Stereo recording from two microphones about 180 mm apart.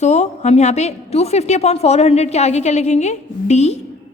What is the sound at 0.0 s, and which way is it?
A woman's voice, 40° left (ahead or behind).